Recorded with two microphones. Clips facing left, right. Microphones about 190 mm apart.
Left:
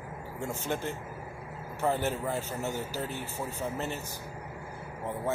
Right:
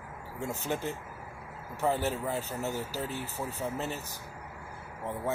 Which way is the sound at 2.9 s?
35° right (ahead or behind).